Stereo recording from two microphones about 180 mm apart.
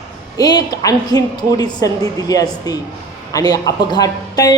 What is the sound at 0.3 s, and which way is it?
A woman's voice, 20° left (ahead or behind).